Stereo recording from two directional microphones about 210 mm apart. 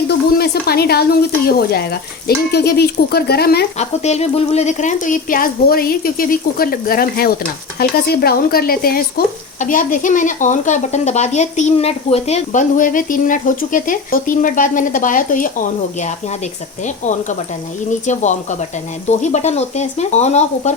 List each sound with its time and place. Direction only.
0.1 s speech: 50° left (ahead or behind)
3.8 s speech: 30° left (ahead or behind)